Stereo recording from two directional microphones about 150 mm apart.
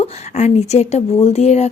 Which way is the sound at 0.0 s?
45° left (ahead or behind).